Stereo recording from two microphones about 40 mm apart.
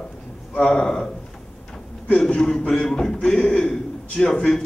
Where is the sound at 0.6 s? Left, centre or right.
Centre.